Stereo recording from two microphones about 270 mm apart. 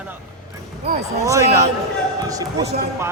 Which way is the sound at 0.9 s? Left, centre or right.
Right.